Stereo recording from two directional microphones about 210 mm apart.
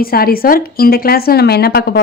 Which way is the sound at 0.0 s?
45° left (ahead or behind).